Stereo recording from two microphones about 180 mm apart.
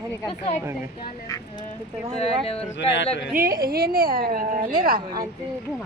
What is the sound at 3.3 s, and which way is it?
A woman's voice, 55° right (ahead or behind).